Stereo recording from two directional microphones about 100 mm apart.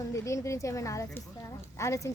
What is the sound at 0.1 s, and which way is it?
Speech, 30° left (ahead or behind).